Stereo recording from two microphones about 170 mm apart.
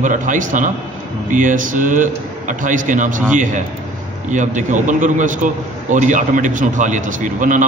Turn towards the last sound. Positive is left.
turn(degrees=-50)  # may be behind; listen again after turning